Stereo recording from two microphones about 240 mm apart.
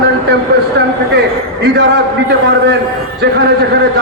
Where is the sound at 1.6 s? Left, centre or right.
Right.